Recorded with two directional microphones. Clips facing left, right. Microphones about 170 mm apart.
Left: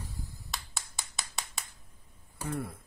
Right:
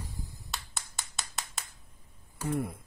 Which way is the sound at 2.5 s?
20° right (ahead or behind).